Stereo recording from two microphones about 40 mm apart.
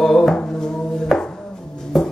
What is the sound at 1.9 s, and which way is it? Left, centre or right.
Music, centre.